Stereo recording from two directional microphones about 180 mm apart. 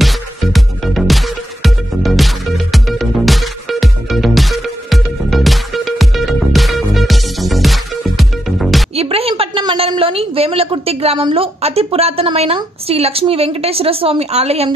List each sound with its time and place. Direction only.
0.0 s music: centre (ahead or behind)
8.9 s a sound: 35° right (ahead or behind)
11.1 s a woman's voice: 30° right (ahead or behind)